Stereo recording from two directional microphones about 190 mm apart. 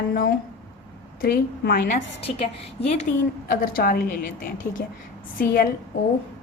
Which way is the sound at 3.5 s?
50° left (ahead or behind).